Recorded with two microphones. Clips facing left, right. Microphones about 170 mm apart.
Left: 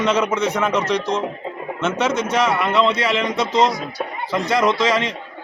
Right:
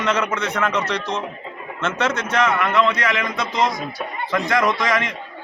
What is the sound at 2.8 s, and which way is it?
Speech, 30° left (ahead or behind).